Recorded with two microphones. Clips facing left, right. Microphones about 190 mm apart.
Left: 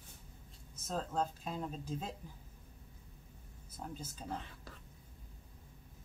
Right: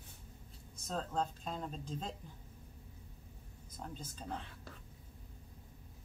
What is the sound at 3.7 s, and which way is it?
Speech, 5° left (ahead or behind).